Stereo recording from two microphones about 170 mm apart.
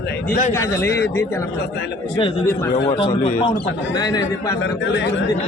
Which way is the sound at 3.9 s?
20° left (ahead or behind).